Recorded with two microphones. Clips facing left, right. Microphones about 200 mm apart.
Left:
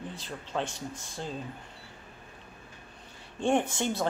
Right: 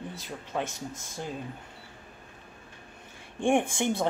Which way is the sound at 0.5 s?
5° right (ahead or behind).